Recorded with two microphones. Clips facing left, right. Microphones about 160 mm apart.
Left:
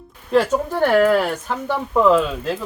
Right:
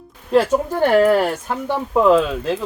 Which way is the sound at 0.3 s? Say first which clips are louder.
Right 2 dB; 5° right (ahead or behind).